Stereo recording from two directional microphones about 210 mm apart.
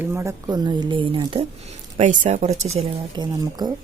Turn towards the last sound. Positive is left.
turn(degrees=-20)  # may be behind; listen again after turning